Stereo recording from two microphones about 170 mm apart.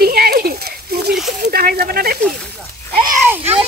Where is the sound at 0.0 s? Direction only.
60° right (ahead or behind).